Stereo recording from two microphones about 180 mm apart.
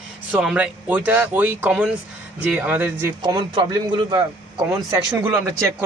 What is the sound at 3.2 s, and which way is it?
A man's voice, 25° right (ahead or behind).